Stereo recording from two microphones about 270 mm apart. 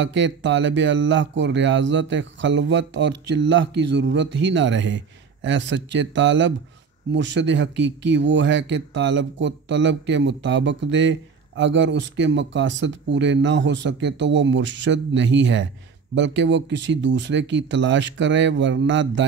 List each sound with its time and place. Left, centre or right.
0.0 s speech: right